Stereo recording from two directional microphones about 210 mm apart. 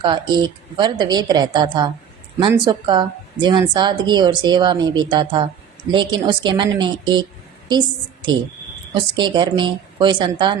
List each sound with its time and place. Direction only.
0.0 s a woman's voice: 20° right (ahead or behind)